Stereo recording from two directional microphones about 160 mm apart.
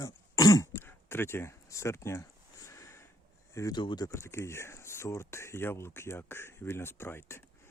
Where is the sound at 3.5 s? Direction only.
25° left (ahead or behind).